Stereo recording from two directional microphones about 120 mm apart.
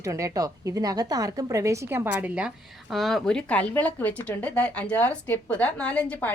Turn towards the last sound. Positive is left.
turn(degrees=10)  # may be behind; listen again after turning